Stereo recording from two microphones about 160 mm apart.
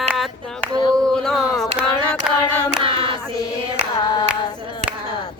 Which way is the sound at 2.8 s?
35° right (ahead or behind).